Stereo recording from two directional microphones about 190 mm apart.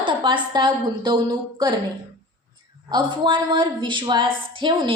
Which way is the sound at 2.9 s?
25° right (ahead or behind).